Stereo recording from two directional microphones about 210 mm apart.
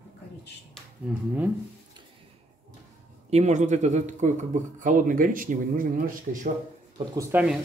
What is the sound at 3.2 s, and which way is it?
Speech, 30° right (ahead or behind).